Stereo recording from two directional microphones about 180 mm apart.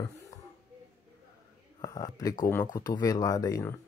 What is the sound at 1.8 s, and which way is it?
Speech, 20° left (ahead or behind).